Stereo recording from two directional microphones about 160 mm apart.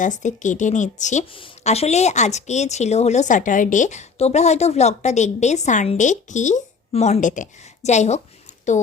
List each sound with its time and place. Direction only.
0.0 s a woman's voice: 50° left (ahead or behind)
1.3 s a woman's voice: 35° left (ahead or behind)